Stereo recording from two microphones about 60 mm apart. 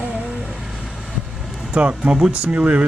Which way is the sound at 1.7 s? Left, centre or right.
Centre.